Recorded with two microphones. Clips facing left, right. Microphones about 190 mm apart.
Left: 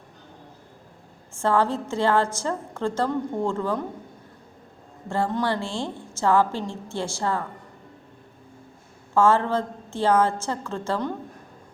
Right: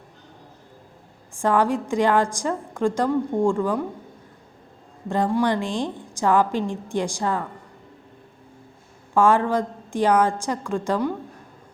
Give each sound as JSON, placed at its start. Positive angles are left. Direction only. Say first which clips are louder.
{"t": 1.3, "sound": "a woman's voice", "louder": "right 2 dB", "side_deg": -15}
{"t": 5.0, "sound": "a woman's voice", "louder": "right 4 dB", "side_deg": -15}
{"t": 9.1, "sound": "a woman's voice", "louder": "right 1 dB", "side_deg": -15}